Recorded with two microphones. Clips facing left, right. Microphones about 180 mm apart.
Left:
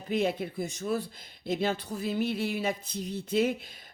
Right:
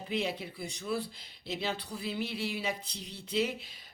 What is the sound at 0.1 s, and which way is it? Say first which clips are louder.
Speech: left 6 dB; 50° left (ahead or behind).